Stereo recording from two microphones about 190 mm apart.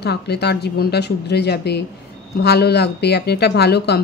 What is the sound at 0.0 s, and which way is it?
Speech, 60° left (ahead or behind).